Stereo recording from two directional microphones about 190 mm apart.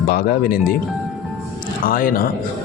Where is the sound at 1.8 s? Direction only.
50° left (ahead or behind).